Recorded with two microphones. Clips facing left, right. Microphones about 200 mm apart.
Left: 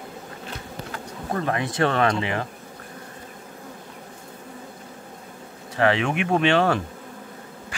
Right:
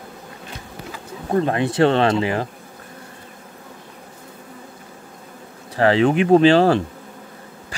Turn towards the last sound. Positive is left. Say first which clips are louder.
# right 7 dB
turn(degrees=-35)  # may be behind; listen again after turning